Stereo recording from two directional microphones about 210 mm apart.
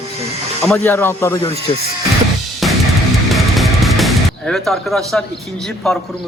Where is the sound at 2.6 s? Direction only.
Centre (ahead or behind).